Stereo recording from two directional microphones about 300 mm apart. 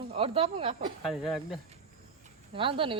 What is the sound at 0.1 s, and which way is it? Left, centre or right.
Speech, centre.